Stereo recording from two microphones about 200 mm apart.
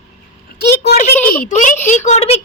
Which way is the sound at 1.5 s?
40° left (ahead or behind).